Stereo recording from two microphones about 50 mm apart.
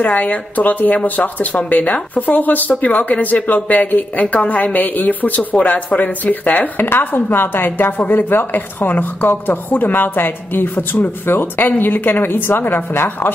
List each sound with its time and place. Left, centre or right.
0.0 s a woman's voice: left